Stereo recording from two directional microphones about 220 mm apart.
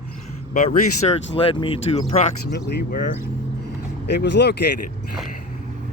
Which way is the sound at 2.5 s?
45° left (ahead or behind).